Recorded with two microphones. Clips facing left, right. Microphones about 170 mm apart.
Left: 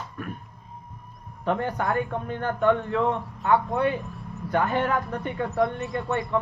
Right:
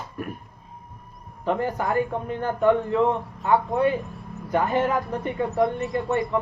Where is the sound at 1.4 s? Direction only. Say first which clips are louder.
Right 1 dB; centre (ahead or behind).